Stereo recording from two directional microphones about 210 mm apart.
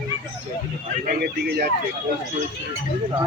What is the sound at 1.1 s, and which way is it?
Speech, 50° right (ahead or behind).